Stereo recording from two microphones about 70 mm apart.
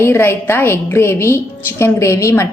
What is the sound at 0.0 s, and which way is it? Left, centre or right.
A woman's voice, left.